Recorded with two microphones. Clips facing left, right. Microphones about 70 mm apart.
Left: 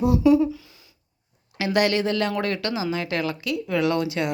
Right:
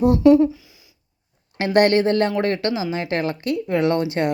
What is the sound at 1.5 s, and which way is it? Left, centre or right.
Speech, right.